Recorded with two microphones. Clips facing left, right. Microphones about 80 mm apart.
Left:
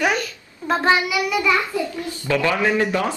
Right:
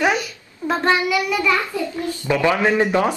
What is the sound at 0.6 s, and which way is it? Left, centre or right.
Child singing, centre.